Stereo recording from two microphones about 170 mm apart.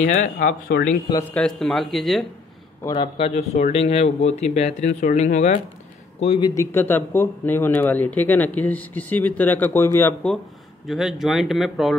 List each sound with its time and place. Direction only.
0.0 s speech: 45° left (ahead or behind)
0.5 s speech: 60° left (ahead or behind)
1.3 s speech: 5° left (ahead or behind)
2.9 s a man's voice: 35° left (ahead or behind)
6.4 s speech: 20° left (ahead or behind)
10.9 s speech: centre (ahead or behind)